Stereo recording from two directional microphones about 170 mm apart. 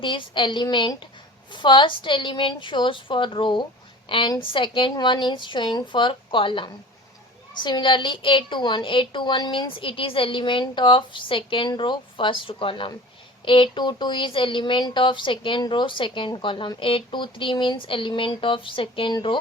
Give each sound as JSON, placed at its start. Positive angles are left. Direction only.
{"t": 0.0, "sound": "speech", "side_deg": 30}